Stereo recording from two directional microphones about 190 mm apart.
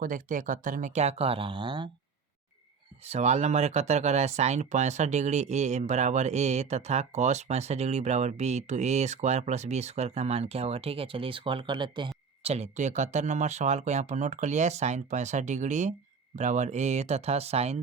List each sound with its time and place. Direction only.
0.0 s speech: 45° right (ahead or behind); by 1.9 s 25° right (ahead or behind)
3.0 s speech: 35° right (ahead or behind)